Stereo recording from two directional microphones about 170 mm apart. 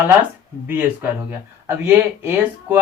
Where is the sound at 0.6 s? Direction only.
10° right (ahead or behind).